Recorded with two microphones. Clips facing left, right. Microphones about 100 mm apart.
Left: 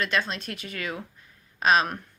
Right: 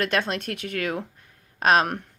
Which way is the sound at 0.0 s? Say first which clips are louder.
Right 3 dB; 60° right (ahead or behind).